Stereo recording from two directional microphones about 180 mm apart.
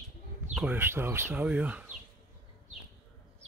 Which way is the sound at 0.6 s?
10° right (ahead or behind).